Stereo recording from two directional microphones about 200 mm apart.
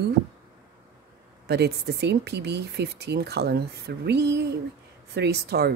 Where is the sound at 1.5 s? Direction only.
55° right (ahead or behind).